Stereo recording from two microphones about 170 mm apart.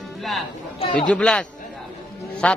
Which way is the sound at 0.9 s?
5° left (ahead or behind).